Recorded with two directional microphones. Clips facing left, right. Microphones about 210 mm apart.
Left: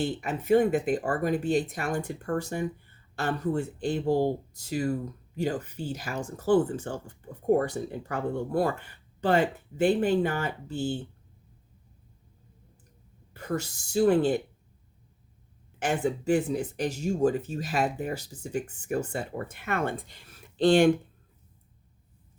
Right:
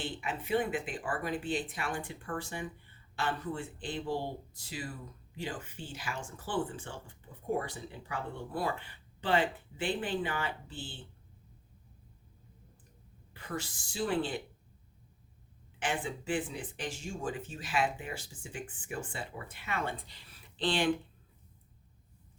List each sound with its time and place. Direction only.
0.0 s speech: 45° left (ahead or behind)
13.3 s speech: 45° left (ahead or behind)
15.8 s speech: 40° left (ahead or behind)